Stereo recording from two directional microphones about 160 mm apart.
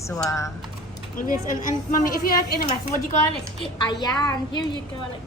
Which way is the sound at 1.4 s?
55° left (ahead or behind).